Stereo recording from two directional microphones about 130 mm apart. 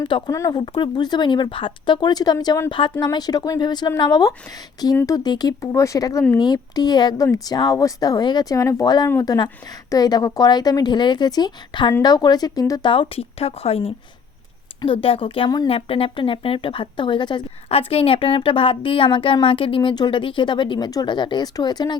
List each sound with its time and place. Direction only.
0.0 s speech: 30° left (ahead or behind)
12.9 s speech: 45° left (ahead or behind)
14.9 s speech: 45° left (ahead or behind)
15.4 s speech: 30° left (ahead or behind)
15.7 s speech: 45° left (ahead or behind)
17.7 s speech: 50° left (ahead or behind)